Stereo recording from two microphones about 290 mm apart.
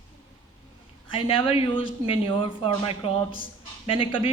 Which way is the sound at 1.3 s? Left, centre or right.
Centre.